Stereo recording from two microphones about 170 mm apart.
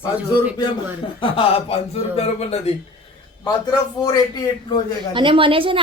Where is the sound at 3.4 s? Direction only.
25° left (ahead or behind).